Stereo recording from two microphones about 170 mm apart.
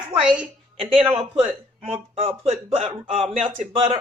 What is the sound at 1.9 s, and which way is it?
A woman's voice, 35° right (ahead or behind).